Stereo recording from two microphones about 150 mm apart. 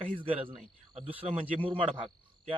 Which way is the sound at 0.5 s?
40° right (ahead or behind).